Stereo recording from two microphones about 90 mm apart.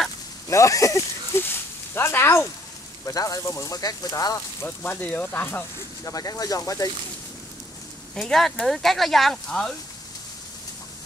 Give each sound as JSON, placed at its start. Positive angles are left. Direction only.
{"t": 0.5, "sound": "speech", "side_deg": 35}
{"t": 1.4, "sound": "speech", "side_deg": 25}
{"t": 3.1, "sound": "speech", "side_deg": 40}
{"t": 4.6, "sound": "speech", "side_deg": 20}
{"t": 6.0, "sound": "speech", "side_deg": 40}
{"t": 8.1, "sound": "speech", "side_deg": 5}